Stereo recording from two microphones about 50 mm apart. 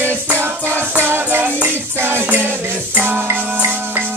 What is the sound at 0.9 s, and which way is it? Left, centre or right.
Music, right.